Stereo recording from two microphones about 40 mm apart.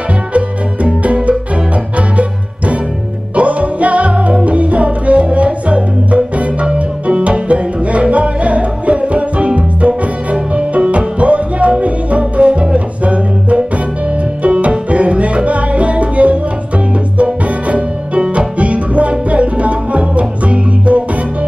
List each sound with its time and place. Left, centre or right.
1.0 s music: right